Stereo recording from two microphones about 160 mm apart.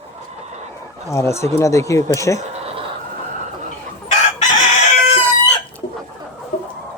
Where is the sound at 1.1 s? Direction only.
15° left (ahead or behind).